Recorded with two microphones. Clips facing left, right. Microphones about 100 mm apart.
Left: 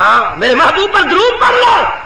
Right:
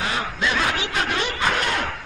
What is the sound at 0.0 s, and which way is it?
A man's voice, 85° left.